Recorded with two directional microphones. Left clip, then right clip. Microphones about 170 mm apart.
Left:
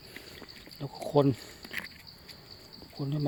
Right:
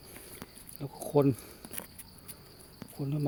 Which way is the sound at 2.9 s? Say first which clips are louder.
Left 1 dB; 5° left (ahead or behind).